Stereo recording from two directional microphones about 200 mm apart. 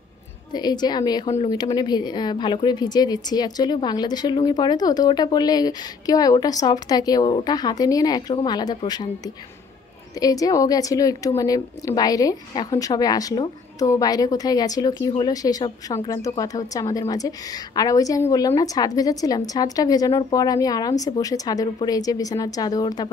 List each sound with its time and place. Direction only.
0.5 s a woman's voice: 20° left (ahead or behind)